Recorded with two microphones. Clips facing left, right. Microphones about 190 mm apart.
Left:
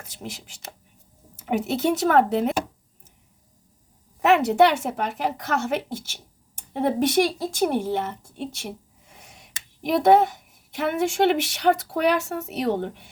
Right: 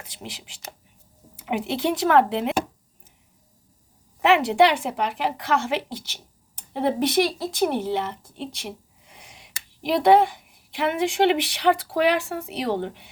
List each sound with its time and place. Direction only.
0.2 s a woman's voice: 45° left (ahead or behind)
4.3 s a woman's voice: 45° left (ahead or behind)
9.0 s a sound: 45° left (ahead or behind)
9.8 s a woman's voice: 50° left (ahead or behind)